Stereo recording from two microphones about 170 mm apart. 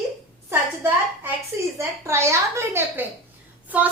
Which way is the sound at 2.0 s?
15° right (ahead or behind).